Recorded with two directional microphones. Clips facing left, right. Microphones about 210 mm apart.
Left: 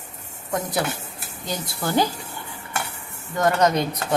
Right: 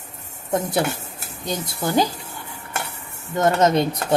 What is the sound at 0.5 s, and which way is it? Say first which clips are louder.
Speech: right 3 dB; 25° right (ahead or behind).